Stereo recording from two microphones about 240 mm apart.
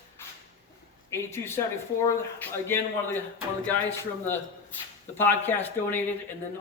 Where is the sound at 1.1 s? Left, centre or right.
Centre.